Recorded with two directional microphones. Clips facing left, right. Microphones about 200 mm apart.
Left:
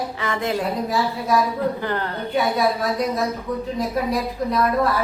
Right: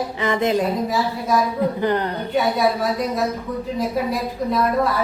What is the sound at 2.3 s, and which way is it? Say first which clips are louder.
A woman's voice: right 1 dB; centre (ahead or behind).